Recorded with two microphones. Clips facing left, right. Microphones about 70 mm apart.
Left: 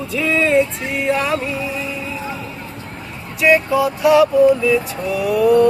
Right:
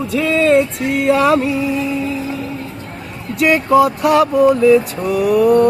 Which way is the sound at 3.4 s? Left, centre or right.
Right.